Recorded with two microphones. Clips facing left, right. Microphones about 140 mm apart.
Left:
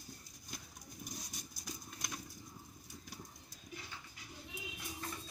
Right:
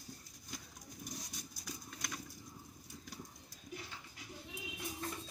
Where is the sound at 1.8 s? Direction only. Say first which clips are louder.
Right 1 dB; 15° left (ahead or behind).